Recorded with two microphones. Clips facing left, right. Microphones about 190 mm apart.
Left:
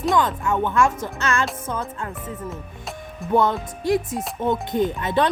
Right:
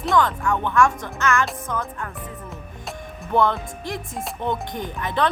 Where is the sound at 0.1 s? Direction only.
20° left (ahead or behind).